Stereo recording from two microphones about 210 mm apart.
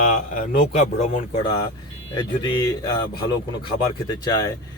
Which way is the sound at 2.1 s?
20° left (ahead or behind).